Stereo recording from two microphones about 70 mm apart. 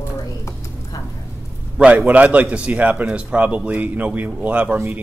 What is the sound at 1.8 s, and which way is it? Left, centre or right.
Speech, centre.